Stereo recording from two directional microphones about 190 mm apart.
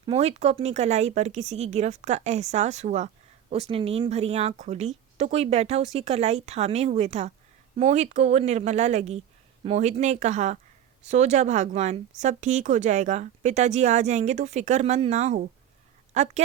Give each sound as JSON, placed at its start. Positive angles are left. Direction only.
{"t": 0.0, "sound": "speech", "side_deg": -30}